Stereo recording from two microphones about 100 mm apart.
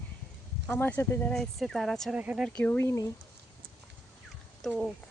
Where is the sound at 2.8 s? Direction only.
30° left (ahead or behind).